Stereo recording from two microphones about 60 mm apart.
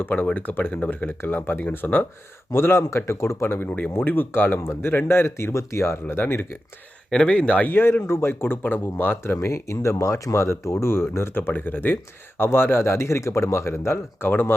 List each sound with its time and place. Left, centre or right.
0.0 s speech: left
2.6 s speech: left
4.6 s speech: left
7.1 s speech: centre
7.7 s speech: left